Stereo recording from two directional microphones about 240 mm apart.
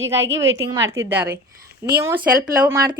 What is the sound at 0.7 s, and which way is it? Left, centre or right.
Speech, centre.